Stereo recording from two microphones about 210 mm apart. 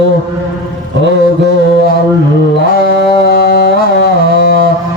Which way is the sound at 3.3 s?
45° left (ahead or behind).